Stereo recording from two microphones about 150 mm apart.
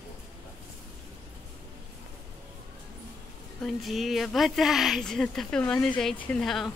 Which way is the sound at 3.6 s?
Centre (ahead or behind).